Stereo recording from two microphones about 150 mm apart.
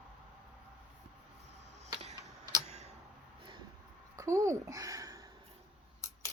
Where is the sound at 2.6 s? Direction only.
45° right (ahead or behind).